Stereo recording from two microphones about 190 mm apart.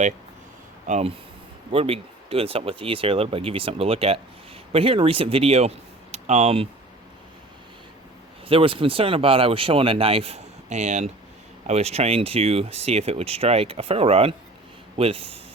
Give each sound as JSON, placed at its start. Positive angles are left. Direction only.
{"t": 0.9, "sound": "speech", "side_deg": -35}
{"t": 8.4, "sound": "a man's voice", "side_deg": -30}